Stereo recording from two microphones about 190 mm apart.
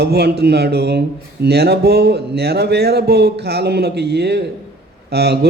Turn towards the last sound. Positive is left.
turn(degrees=-60)  # may be behind; listen again after turning